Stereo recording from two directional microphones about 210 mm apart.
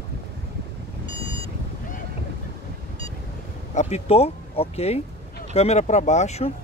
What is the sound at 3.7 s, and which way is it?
Speech, 30° left (ahead or behind).